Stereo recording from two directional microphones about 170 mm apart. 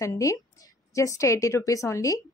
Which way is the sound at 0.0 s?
20° left (ahead or behind).